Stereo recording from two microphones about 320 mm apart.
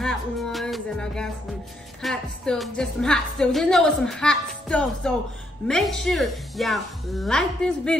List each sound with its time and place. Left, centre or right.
0.0 s music: centre
2.0 s a woman's voice: centre